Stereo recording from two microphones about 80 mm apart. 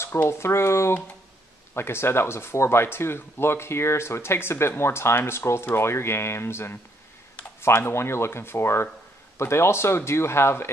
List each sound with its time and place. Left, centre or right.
0.0 s speech: left